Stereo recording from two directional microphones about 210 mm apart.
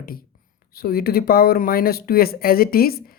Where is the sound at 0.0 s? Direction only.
45° left (ahead or behind).